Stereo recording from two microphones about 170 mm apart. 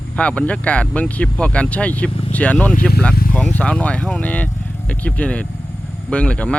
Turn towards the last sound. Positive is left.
turn(degrees=5)  # may be behind; listen again after turning